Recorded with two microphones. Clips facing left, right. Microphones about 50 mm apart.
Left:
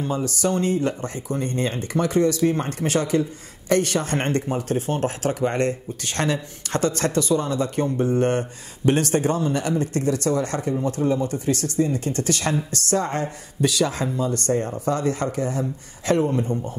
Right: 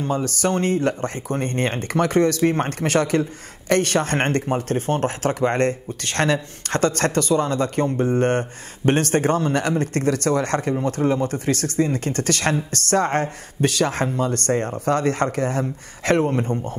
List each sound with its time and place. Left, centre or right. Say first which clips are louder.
0.0 s speech: right 1 dB; right